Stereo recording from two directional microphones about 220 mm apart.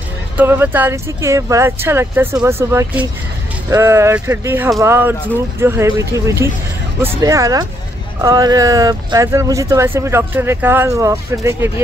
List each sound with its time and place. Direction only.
0.4 s speech: 10° right (ahead or behind)